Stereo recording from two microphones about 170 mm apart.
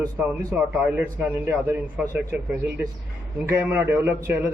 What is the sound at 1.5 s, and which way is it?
Speech, 10° right (ahead or behind).